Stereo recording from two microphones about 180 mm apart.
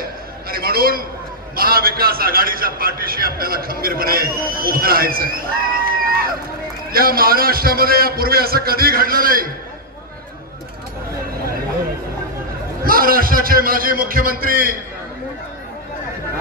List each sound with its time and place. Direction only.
0.5 s a sound: 55° right (ahead or behind)
1.5 s a man's voice: 55° right (ahead or behind)
12.8 s a man's voice: 55° right (ahead or behind)